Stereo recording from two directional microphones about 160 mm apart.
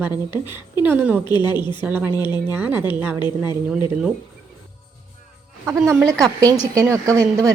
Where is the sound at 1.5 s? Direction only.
30° left (ahead or behind).